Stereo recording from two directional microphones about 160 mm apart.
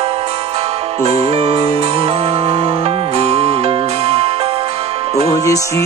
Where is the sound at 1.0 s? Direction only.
40° right (ahead or behind).